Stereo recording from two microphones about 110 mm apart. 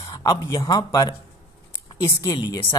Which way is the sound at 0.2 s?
35° left (ahead or behind).